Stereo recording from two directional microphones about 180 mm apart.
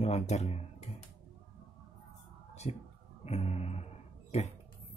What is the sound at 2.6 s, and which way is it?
Speech, 35° left (ahead or behind).